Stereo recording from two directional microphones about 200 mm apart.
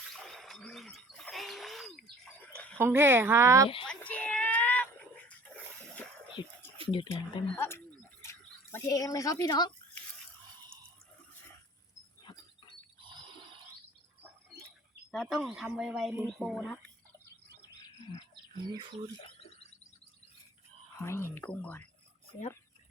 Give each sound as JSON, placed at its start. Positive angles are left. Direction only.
{"t": 0.2, "sound": "a sound", "side_deg": 0}
{"t": 2.7, "sound": "speech", "side_deg": -10}
{"t": 3.8, "sound": "a sound", "side_deg": 5}
{"t": 6.4, "sound": "speech", "side_deg": 20}
{"t": 7.1, "sound": "speech", "side_deg": 15}
{"t": 15.1, "sound": "speech", "side_deg": 0}
{"t": 18.7, "sound": "speech", "side_deg": -25}
{"t": 19.2, "sound": "a sound", "side_deg": 30}
{"t": 21.0, "sound": "speech", "side_deg": 15}